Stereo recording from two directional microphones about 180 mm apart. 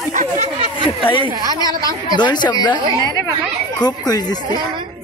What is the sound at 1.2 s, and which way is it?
Speech, 20° right (ahead or behind).